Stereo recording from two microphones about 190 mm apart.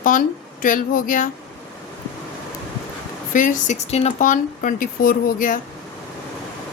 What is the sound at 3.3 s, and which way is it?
Speech, 40° left (ahead or behind).